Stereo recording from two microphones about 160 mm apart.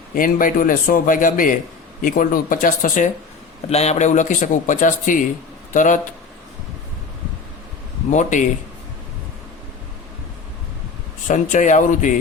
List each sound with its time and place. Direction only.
0.1 s a man's voice: 60° left (ahead or behind)
3.7 s speech: 40° left (ahead or behind)
8.1 s speech: 50° left (ahead or behind)
11.3 s speech: 50° left (ahead or behind)